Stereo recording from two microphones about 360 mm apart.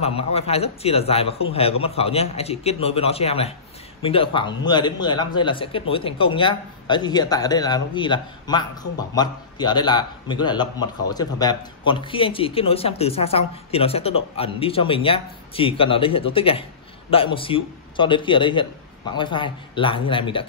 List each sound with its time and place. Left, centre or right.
0.0 s speech: centre